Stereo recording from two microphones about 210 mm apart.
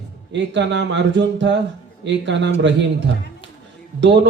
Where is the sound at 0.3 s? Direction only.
60° right (ahead or behind).